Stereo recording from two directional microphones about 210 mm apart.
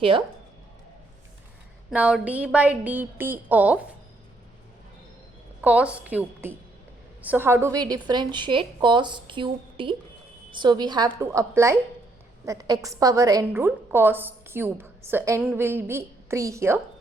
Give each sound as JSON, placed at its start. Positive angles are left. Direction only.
{"t": 1.9, "sound": "a woman's voice", "side_deg": -5}
{"t": 5.6, "sound": "a woman's voice", "side_deg": -5}